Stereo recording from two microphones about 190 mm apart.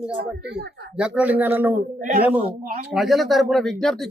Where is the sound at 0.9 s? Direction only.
5° right (ahead or behind).